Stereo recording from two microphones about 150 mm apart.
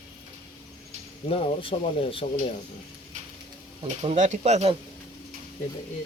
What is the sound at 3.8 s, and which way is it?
Speech, 50° right (ahead or behind).